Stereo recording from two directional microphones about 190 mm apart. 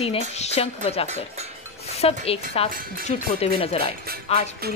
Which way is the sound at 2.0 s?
30° left (ahead or behind).